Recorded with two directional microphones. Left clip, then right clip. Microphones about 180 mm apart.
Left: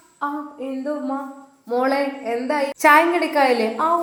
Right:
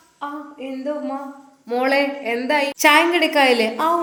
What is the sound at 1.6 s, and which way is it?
A woman's voice, 10° right (ahead or behind).